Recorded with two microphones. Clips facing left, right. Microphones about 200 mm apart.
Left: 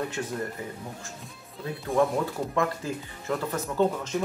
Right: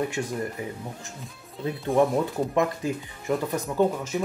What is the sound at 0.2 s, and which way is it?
Speech, 15° right (ahead or behind).